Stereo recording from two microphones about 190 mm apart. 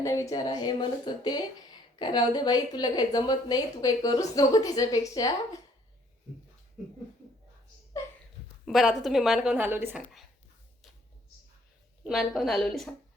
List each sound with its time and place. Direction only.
0.0 s a woman's voice: 15° left (ahead or behind)
8.6 s a woman's voice: centre (ahead or behind)
10.0 s speech: centre (ahead or behind)
12.0 s a woman's voice: centre (ahead or behind)